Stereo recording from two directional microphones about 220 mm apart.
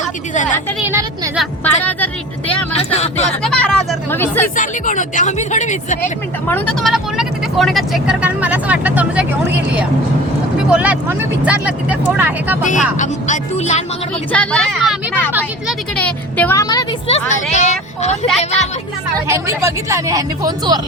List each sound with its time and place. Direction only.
0.9 s speech: 15° right (ahead or behind)
1.4 s speech: 5° left (ahead or behind)
2.7 s a sound: 25° left (ahead or behind)
3.4 s a sound: 5° left (ahead or behind)
4.5 s speech: 35° left (ahead or behind)
6.5 s speech: 5° left (ahead or behind)
10.7 s speech: 5° right (ahead or behind)
12.6 s speech: 35° left (ahead or behind)
14.3 s a woman's voice: 5° left (ahead or behind)
16.0 s a woman's voice: 5° left (ahead or behind)
17.3 s a woman's voice: 30° left (ahead or behind)
19.3 s speech: 15° right (ahead or behind)